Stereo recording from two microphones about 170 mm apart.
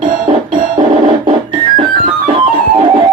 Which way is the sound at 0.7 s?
25° right (ahead or behind).